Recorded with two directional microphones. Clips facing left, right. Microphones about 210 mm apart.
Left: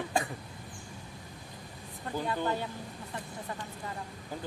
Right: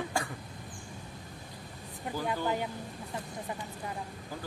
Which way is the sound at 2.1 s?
15° right (ahead or behind).